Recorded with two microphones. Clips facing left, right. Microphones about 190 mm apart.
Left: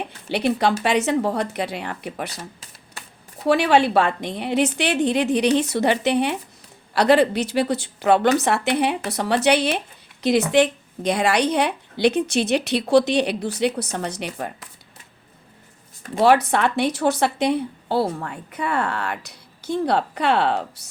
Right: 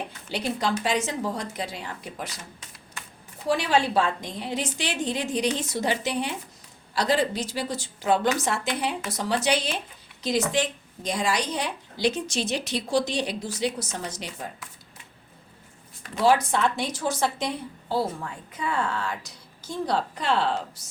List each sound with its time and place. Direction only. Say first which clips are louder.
0.3 s a woman's voice: left 7 dB; 65° left (ahead or behind)
3.4 s a woman's voice: left 6 dB; 65° left (ahead or behind)
16.2 s a woman's voice: left 4 dB; 65° left (ahead or behind)